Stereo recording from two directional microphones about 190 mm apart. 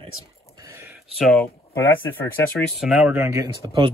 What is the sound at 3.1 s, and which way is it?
Speech, 15° right (ahead or behind).